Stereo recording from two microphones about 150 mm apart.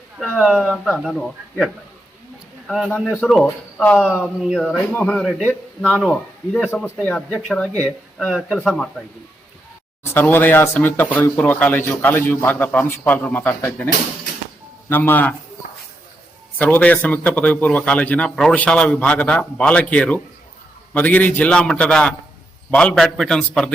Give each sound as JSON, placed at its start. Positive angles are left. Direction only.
{"t": 0.2, "sound": "speech", "side_deg": 0}
{"t": 4.9, "sound": "speech", "side_deg": 10}
{"t": 10.0, "sound": "speech", "side_deg": 15}
{"t": 16.6, "sound": "speech", "side_deg": 10}